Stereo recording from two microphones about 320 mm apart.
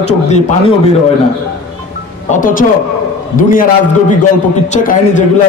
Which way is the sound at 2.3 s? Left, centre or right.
Left.